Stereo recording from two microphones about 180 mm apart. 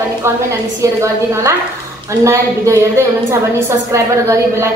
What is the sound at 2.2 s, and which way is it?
Speech, 15° right (ahead or behind).